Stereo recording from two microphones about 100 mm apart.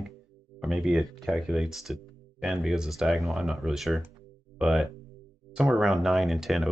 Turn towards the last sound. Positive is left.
turn(degrees=0)  # may be behind; listen again after turning